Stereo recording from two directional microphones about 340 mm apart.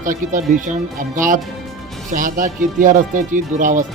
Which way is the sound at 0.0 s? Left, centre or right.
Right.